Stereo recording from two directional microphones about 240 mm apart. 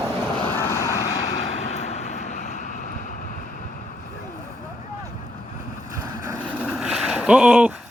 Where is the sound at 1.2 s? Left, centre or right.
Left.